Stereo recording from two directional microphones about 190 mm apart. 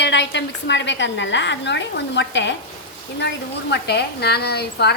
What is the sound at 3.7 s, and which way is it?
A woman's voice, 60° left (ahead or behind).